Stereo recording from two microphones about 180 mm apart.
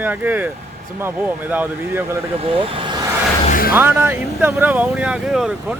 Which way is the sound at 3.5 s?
55° left (ahead or behind).